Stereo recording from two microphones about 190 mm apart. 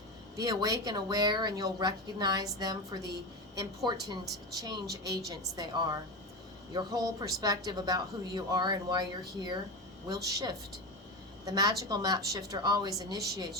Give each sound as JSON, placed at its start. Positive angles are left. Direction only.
{"t": 0.4, "sound": "a woman's voice", "side_deg": -20}
{"t": 10.1, "sound": "a woman's voice", "side_deg": -20}